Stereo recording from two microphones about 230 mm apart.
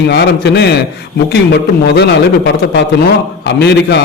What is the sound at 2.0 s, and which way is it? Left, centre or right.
A man's voice, left.